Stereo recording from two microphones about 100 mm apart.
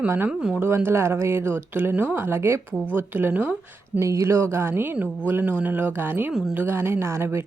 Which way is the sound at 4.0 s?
30° right (ahead or behind).